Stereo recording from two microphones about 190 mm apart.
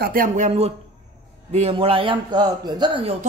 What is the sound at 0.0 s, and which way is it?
Speech, 50° right (ahead or behind).